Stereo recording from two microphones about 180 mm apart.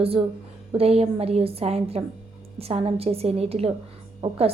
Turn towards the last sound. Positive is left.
turn(degrees=-35)  # may be behind; listen again after turning